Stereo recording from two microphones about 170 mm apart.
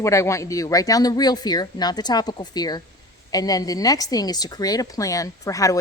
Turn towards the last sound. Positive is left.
turn(degrees=20)  # may be behind; listen again after turning